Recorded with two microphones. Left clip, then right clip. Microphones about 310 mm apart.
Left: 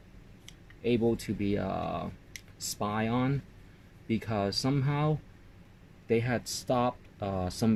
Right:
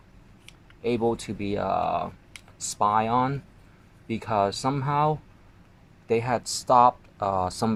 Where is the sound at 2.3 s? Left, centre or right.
Centre.